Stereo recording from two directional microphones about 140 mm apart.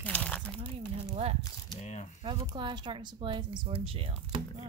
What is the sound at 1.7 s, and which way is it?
Speech, 50° left (ahead or behind).